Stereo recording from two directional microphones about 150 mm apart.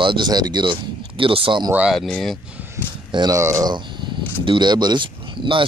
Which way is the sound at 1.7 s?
5° right (ahead or behind).